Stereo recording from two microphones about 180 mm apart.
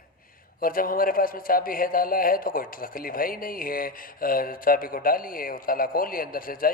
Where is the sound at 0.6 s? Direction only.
50° left (ahead or behind).